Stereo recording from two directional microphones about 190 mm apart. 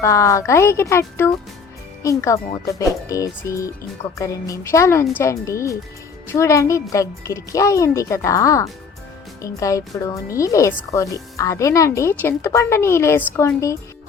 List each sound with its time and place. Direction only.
0.0 s speech: 15° left (ahead or behind)